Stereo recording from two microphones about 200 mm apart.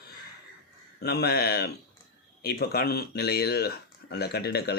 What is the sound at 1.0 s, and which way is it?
Speech, 50° left (ahead or behind).